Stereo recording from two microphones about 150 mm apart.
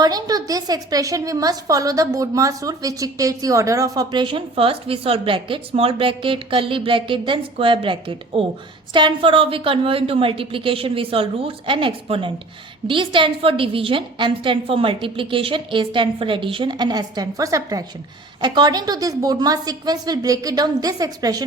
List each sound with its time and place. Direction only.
0.0 s a woman's voice: 25° right (ahead or behind)